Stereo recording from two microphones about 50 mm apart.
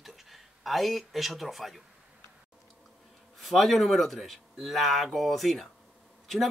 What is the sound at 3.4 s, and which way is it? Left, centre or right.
Speech, centre.